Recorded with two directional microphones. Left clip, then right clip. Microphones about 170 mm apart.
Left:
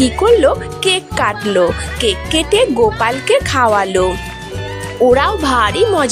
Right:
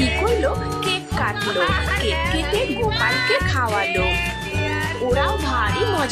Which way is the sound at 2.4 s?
45° left (ahead or behind).